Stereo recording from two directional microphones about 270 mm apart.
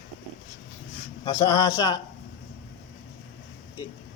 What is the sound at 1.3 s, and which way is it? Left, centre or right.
Speech, centre.